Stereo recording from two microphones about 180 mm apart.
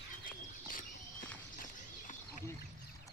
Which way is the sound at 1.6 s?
45° left (ahead or behind).